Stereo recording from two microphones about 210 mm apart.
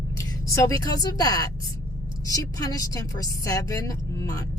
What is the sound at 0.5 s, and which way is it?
A woman's voice, 15° left (ahead or behind).